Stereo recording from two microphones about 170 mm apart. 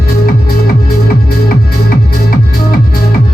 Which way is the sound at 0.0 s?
60° left (ahead or behind).